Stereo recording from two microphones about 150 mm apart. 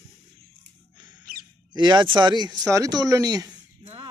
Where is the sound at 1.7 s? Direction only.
30° right (ahead or behind).